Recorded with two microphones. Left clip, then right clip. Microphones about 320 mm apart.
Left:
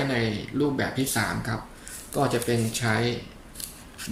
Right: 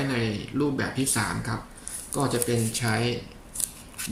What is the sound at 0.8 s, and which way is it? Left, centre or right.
Speech, centre.